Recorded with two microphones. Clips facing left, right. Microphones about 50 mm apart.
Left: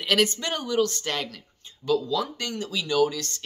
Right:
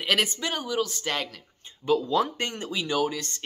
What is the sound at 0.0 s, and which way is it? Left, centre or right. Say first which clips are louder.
Speech: left 2 dB; centre.